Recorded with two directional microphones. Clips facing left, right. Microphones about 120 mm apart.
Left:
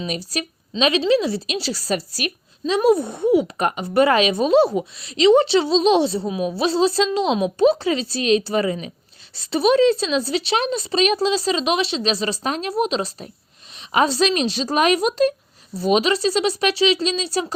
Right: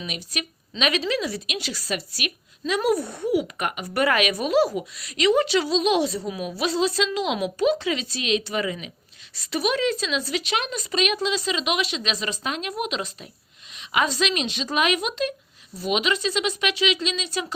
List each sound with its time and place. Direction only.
0.0 s a woman's voice: 35° left (ahead or behind)